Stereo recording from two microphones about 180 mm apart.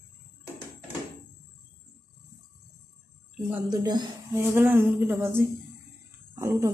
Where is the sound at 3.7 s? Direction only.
20° right (ahead or behind).